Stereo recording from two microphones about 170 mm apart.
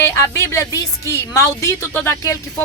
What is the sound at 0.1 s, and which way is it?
Speech, 15° left (ahead or behind).